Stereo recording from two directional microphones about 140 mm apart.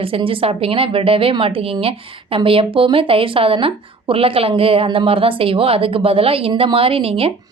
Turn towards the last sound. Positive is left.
turn(degrees=-40)  # may be behind; listen again after turning